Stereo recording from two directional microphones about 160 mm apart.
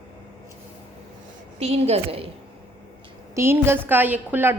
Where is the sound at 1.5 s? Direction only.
40° right (ahead or behind).